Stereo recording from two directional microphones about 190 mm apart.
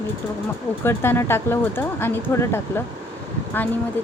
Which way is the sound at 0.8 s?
10° left (ahead or behind).